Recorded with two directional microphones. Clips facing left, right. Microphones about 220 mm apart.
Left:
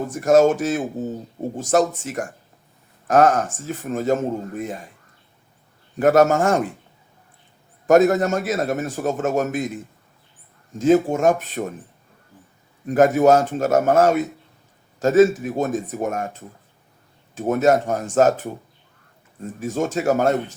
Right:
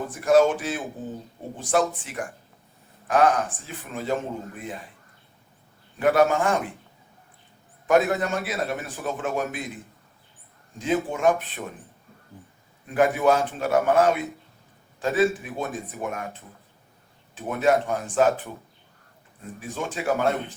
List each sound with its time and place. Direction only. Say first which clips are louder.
0.1 s speech: left 4 dB; 45° left (ahead or behind)
6.0 s speech: left 5 dB; 45° left (ahead or behind)
7.9 s speech: left 6 dB; 45° left (ahead or behind)
10.7 s speech: left 9 dB; 45° left (ahead or behind)
12.9 s speech: left 6 dB; 45° left (ahead or behind)
19.5 s speech: left 8 dB; 45° left (ahead or behind)